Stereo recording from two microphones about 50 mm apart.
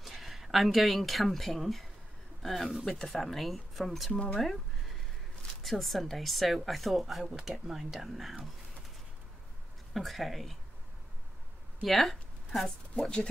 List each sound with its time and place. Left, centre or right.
0.0 s speech: centre
4.1 s speech: left
4.4 s a sound: centre
5.6 s speech: centre
7.2 s speech: centre
9.9 s speech: centre
11.8 s speech: centre
13.0 s speech: centre